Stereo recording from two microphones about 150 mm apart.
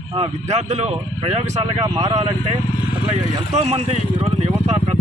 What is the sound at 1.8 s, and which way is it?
Speech, 30° right (ahead or behind).